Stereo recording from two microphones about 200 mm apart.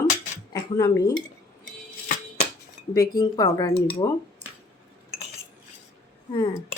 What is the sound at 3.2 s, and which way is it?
A woman's voice, 20° left (ahead or behind).